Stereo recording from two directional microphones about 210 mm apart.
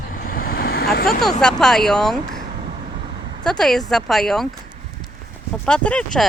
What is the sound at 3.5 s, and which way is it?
Speech, centre (ahead or behind).